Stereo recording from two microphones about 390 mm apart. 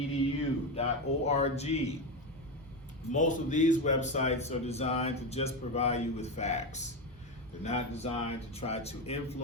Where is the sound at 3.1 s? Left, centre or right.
Centre.